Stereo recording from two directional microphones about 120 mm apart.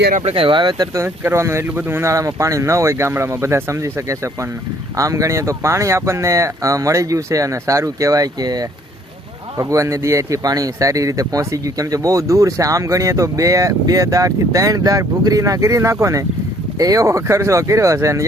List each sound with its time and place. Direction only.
0.3 s speech: 50° right (ahead or behind)
0.9 s speech: 20° right (ahead or behind)